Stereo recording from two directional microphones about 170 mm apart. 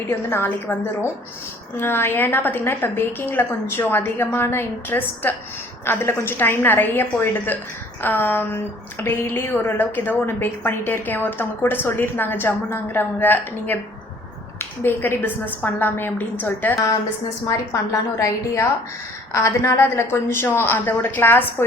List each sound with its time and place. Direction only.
0.1 s a woman's voice: 10° left (ahead or behind)
18.2 s a woman's voice: 15° left (ahead or behind)